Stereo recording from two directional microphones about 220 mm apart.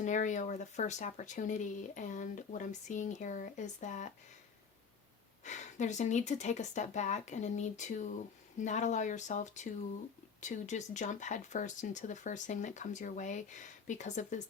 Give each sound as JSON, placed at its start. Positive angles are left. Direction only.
{"t": 0.0, "sound": "speech", "side_deg": 35}
{"t": 5.4, "sound": "speech", "side_deg": 35}